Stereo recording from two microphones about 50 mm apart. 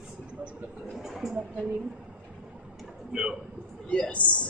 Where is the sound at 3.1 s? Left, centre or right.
Centre.